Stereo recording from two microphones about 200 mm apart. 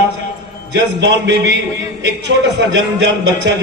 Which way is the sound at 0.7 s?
60° right (ahead or behind).